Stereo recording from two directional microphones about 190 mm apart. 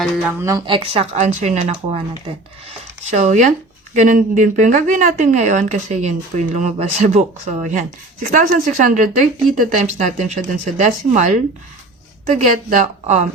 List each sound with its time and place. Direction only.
0.3 s a woman's voice: 15° right (ahead or behind); by 13.2 s 40° right (ahead or behind)